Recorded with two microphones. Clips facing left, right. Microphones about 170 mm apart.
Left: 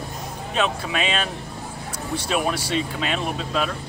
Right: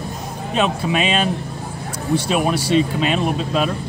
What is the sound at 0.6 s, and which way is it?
Speech, 20° right (ahead or behind).